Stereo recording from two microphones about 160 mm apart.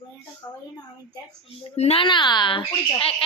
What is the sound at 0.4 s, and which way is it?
Speech, 30° left (ahead or behind).